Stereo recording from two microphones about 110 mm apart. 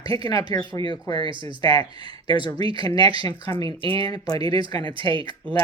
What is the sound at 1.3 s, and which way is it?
Speech, 50° right (ahead or behind).